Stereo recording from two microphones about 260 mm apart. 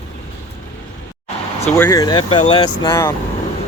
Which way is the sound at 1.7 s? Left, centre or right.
Centre.